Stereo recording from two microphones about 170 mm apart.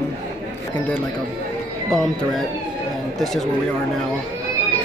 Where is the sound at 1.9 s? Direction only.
Centre (ahead or behind).